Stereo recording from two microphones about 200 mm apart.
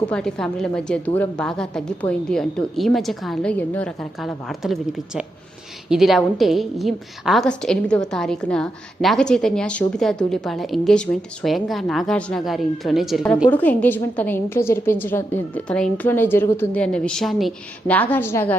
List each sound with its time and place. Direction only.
0.1 s a woman's voice: 5° left (ahead or behind)